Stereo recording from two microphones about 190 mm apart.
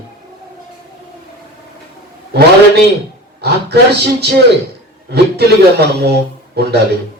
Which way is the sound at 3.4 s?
60° right (ahead or behind).